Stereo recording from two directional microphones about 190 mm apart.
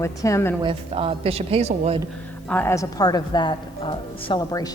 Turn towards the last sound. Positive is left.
turn(degrees=30)  # may be behind; listen again after turning